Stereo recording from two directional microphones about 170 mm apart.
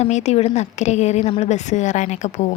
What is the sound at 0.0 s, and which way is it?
A woman's voice, 40° left (ahead or behind).